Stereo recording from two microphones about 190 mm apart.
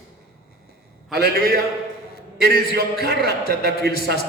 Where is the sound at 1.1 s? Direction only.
60° right (ahead or behind).